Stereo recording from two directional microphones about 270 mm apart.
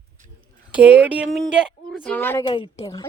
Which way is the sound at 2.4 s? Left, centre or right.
Centre.